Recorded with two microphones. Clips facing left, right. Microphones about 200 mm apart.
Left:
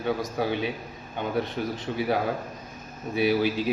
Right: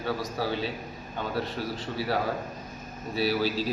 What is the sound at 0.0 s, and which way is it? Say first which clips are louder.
Speech: left 3 dB; 20° left (ahead or behind).